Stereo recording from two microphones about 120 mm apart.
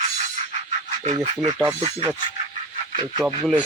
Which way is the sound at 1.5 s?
25° right (ahead or behind).